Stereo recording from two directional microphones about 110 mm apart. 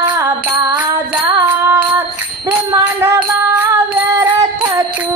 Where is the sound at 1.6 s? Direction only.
25° right (ahead or behind).